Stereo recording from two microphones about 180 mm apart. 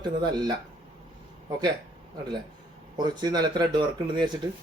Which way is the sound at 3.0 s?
25° right (ahead or behind).